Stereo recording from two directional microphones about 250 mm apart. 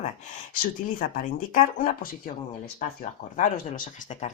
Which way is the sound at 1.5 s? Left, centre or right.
Left.